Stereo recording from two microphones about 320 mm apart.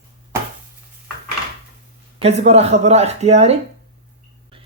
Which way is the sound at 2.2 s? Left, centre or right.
Centre.